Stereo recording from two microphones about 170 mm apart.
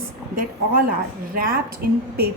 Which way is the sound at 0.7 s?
55° right (ahead or behind).